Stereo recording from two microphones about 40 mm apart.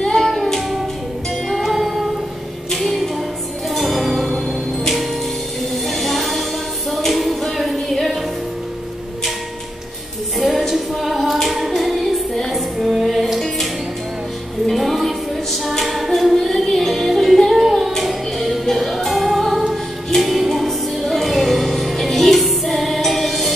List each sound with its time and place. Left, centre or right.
0.0 s music: centre
5.9 s music: centre
10.7 s female singing: centre
11.4 s carnatic music: centre
12.4 s music: centre
14.7 s music: centre
15.8 s female singing: centre
16.3 s music: centre